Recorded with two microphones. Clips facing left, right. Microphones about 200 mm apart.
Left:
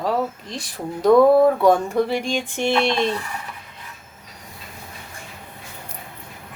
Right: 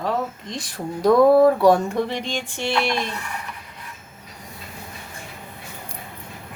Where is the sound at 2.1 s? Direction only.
15° left (ahead or behind).